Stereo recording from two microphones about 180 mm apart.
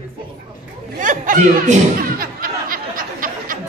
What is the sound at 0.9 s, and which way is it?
Snicker, 45° right (ahead or behind).